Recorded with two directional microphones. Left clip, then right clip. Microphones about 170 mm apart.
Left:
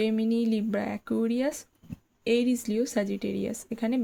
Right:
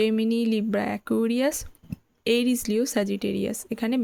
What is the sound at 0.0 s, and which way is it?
Speech, 25° right (ahead or behind).